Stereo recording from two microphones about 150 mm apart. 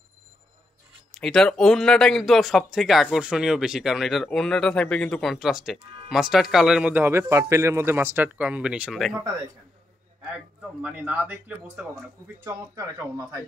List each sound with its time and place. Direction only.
1.1 s speech: 5° left (ahead or behind)
10.8 s a man's voice: 10° right (ahead or behind)